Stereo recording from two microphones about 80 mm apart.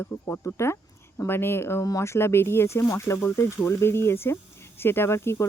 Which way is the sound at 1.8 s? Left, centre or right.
Left.